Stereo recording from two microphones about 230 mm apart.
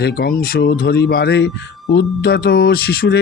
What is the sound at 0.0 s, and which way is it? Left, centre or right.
A man's voice, left.